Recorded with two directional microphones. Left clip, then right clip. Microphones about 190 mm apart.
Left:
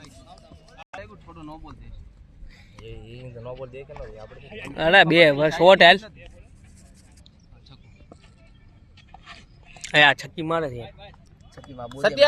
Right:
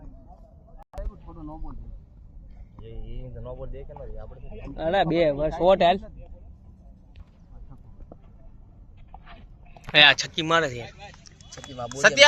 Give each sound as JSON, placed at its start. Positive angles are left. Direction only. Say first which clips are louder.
{"t": 1.3, "sound": "a sound", "louder": "left 1 dB", "side_deg": -15}
{"t": 2.7, "sound": "speech", "louder": "left 3 dB", "side_deg": -15}
{"t": 4.4, "sound": "speech", "louder": "left 9 dB", "side_deg": 0}
{"t": 4.7, "sound": "speech", "louder": "left 7 dB", "side_deg": 30}
{"t": 9.9, "sound": "speech", "louder": "right 1 dB", "side_deg": 10}
{"t": 11.5, "sound": "speech", "louder": "right 3 dB", "side_deg": -45}